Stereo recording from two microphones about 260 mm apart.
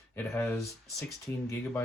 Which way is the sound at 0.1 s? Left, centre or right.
Centre.